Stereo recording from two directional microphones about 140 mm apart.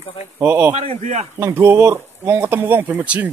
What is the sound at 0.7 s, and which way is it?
Speech, 45° right (ahead or behind).